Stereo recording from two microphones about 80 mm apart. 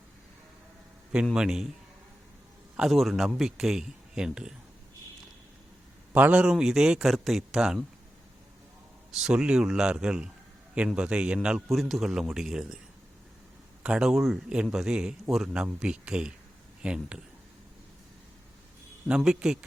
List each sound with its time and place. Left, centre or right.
1.1 s speech: centre
2.7 s a man's voice: centre
6.1 s a man's voice: right
6.4 s a man's voice: centre
9.1 s speech: centre
11.7 s a man's voice: centre
13.8 s a man's voice: centre
19.0 s speech: centre